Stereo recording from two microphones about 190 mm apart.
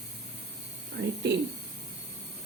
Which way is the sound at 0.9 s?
65° right (ahead or behind).